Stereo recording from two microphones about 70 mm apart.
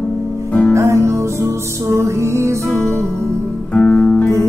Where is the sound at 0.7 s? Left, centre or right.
Right.